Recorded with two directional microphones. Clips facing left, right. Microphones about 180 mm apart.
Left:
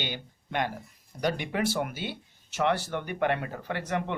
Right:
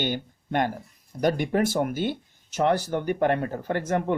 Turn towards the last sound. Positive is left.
turn(degrees=-45)  # may be behind; listen again after turning